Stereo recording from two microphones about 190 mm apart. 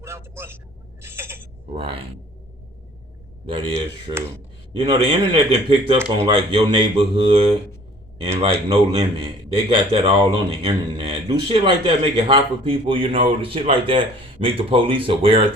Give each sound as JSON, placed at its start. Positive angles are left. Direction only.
{"t": 0.0, "sound": "vehicle", "side_deg": -15}
{"t": 1.0, "sound": "owl", "side_deg": -15}
{"t": 1.7, "sound": "a man's voice", "side_deg": -30}
{"t": 3.4, "sound": "a man's voice", "side_deg": -25}
{"t": 8.7, "sound": "a man's voice", "side_deg": -30}